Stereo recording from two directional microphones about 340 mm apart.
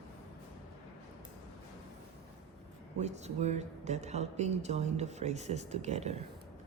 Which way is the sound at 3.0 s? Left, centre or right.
Centre.